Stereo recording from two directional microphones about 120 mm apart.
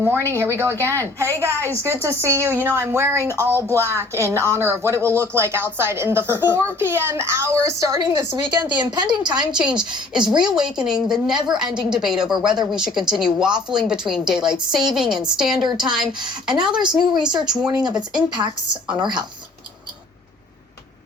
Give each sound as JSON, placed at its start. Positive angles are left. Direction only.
{"t": 0.0, "sound": "speech", "side_deg": -20}
{"t": 8.8, "sound": "speech", "side_deg": -35}
{"t": 9.5, "sound": "a woman's voice", "side_deg": -5}